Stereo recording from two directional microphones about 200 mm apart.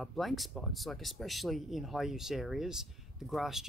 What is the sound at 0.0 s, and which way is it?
Speech, centre (ahead or behind).